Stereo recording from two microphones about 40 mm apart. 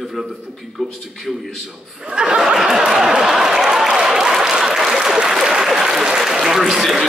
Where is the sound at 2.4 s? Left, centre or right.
Centre.